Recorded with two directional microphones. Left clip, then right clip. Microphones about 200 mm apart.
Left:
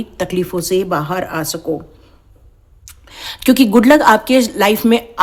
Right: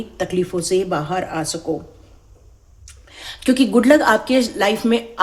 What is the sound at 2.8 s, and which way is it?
Speech, 35° left (ahead or behind).